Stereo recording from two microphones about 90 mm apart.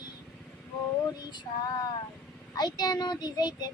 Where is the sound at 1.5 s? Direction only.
40° left (ahead or behind).